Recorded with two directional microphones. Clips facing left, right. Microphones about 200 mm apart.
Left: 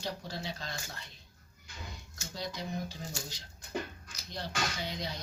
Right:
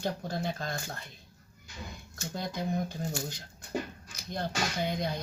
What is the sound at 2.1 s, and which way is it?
Speech, 55° right (ahead or behind).